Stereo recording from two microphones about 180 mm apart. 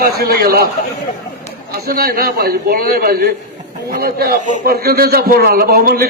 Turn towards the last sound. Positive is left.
turn(degrees=-55)  # may be behind; listen again after turning